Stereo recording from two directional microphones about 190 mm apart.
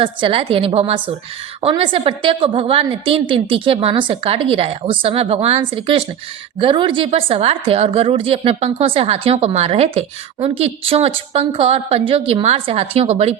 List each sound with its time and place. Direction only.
0.0 s a woman's voice: 30° right (ahead or behind)